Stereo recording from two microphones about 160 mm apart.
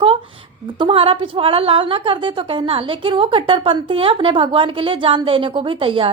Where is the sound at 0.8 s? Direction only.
35° right (ahead or behind).